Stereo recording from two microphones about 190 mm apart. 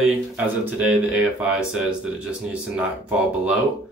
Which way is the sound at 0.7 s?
5° right (ahead or behind).